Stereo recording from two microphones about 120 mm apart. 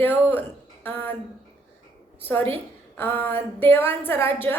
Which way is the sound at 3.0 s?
15° left (ahead or behind).